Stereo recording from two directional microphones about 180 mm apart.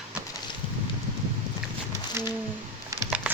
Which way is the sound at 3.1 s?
10° right (ahead or behind).